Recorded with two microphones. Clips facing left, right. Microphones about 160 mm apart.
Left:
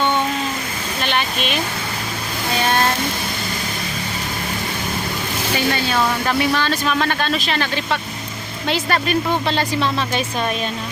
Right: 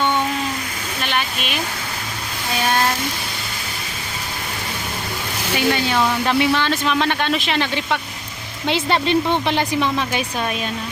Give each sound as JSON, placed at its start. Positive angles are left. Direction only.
{"t": 5.5, "sound": "speech", "side_deg": -15}